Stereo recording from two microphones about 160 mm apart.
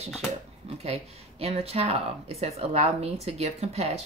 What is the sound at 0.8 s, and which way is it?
Speech, 40° right (ahead or behind).